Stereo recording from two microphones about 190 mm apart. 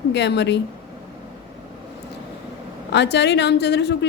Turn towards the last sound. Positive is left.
turn(degrees=65)  # may be behind; listen again after turning